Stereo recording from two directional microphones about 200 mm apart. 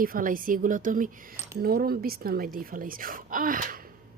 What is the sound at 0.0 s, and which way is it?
Speech, 45° right (ahead or behind).